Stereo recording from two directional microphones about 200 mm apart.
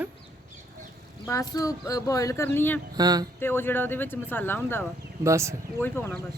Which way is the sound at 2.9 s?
20° right (ahead or behind).